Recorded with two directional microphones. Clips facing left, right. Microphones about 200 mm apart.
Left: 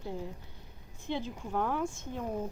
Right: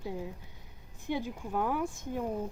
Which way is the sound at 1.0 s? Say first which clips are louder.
Right 1 dB; 10° right (ahead or behind).